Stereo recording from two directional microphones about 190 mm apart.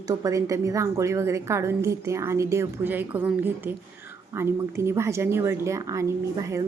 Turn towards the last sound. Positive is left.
turn(degrees=-15)  # may be behind; listen again after turning